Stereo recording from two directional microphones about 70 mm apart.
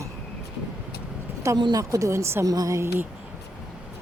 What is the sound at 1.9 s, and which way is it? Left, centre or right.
Speech, right.